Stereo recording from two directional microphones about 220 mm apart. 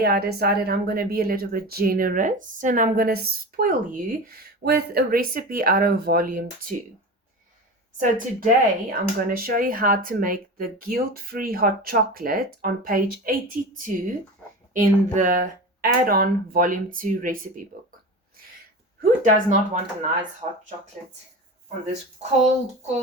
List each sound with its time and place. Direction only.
0.0 s speech: 45° right (ahead or behind)
7.9 s speech: 35° right (ahead or behind)
14.7 s speech: 35° right (ahead or behind)
19.2 s speech: 35° right (ahead or behind)